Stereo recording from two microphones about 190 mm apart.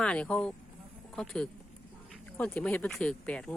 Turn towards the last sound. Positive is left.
turn(degrees=5)  # may be behind; listen again after turning